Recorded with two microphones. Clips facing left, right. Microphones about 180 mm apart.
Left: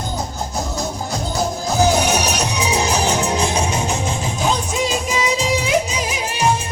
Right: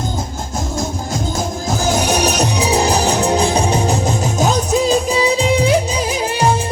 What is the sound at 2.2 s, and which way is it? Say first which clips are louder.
Music: right 4 dB; 35° right (ahead or behind).